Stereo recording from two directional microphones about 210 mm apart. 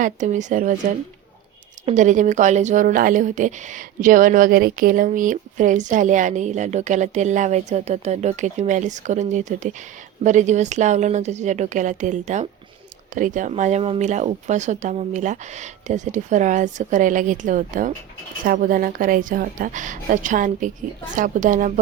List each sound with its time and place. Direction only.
0.0 s speech: 35° right (ahead or behind)
1.9 s speech: 35° right (ahead or behind)